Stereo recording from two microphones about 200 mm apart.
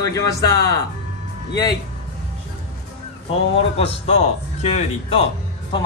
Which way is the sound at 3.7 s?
30° left (ahead or behind).